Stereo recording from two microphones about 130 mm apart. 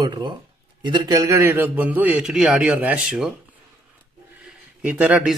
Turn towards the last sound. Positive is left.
turn(degrees=-10)  # may be behind; listen again after turning